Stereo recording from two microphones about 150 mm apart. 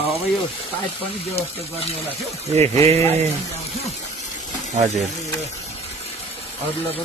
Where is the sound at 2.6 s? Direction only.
45° right (ahead or behind).